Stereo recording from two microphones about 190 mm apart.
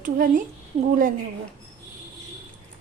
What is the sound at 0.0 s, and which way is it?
Speech, 45° right (ahead or behind).